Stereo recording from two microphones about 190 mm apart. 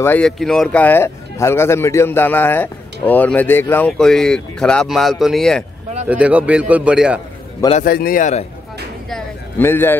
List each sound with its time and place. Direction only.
0.0 s a man's voice: 5° left (ahead or behind)
7.8 s a man's voice: 50° left (ahead or behind)
9.1 s a sound: 10° left (ahead or behind)